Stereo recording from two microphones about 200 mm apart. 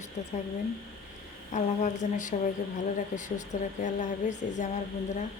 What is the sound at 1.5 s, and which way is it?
Speech, 40° left (ahead or behind).